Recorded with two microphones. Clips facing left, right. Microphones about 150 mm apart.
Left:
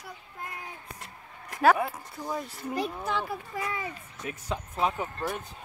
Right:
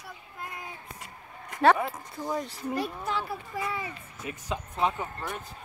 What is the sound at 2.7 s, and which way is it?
Speech, 15° left (ahead or behind).